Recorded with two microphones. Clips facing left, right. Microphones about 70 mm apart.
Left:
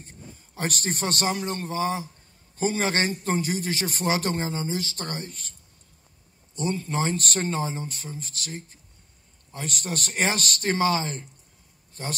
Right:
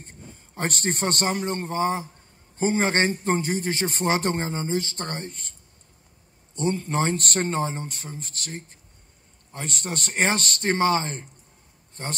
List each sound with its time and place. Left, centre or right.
0.6 s a man's voice: right
6.5 s a man's voice: right